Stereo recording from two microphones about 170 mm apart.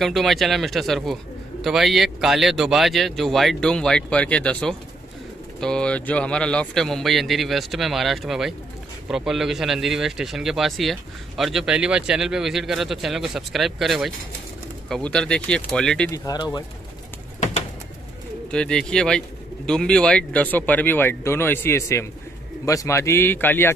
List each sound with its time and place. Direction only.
0.0 s speech: centre (ahead or behind)
16.1 s speech: 20° left (ahead or behind)
18.5 s speech: 5° left (ahead or behind)